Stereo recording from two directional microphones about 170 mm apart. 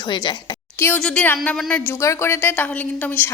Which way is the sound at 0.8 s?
10° left (ahead or behind).